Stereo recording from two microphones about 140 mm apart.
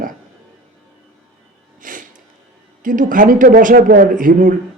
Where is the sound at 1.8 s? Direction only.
70° right (ahead or behind).